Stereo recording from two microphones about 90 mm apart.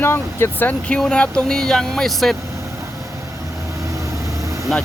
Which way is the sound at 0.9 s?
10° left (ahead or behind).